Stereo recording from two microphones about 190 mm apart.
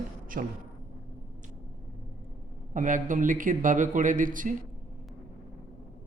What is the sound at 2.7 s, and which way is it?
A man's voice, 45° right (ahead or behind).